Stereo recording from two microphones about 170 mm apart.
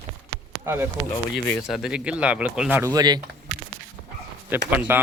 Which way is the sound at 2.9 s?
25° right (ahead or behind).